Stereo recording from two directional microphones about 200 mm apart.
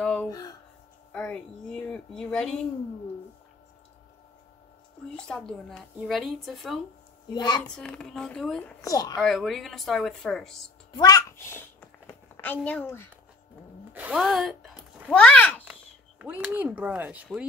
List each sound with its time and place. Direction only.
0.0 s a sound: 5° left (ahead or behind)
0.3 s a child's voice: 20° left (ahead or behind)
1.1 s a woman's voice: 5° left (ahead or behind)
5.1 s a woman's voice: centre (ahead or behind)
7.3 s a child's voice: 20° left (ahead or behind)
7.7 s a woman's voice: 5° left (ahead or behind)
8.8 s a child's voice: 20° left (ahead or behind)
9.2 s a woman's voice: centre (ahead or behind)
10.9 s a sound: 20° left (ahead or behind)
13.9 s a child's voice: 5° right (ahead or behind)
15.6 s speech: 5° right (ahead or behind)